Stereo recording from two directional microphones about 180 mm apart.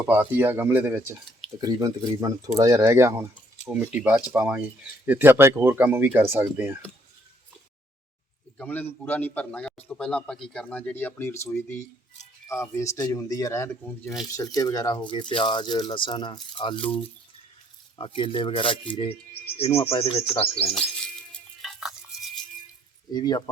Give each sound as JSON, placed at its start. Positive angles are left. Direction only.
{"t": 0.1, "sound": "speech", "side_deg": -10}
{"t": 1.6, "sound": "speech", "side_deg": -20}
{"t": 8.5, "sound": "a man's voice", "side_deg": 10}
{"t": 14.0, "sound": "speech", "side_deg": 0}
{"t": 14.3, "sound": "speech", "side_deg": 20}
{"t": 17.9, "sound": "speech", "side_deg": 30}
{"t": 19.5, "sound": "bird", "side_deg": 35}
{"t": 20.7, "sound": "music", "side_deg": 0}
{"t": 23.1, "sound": "speech", "side_deg": 20}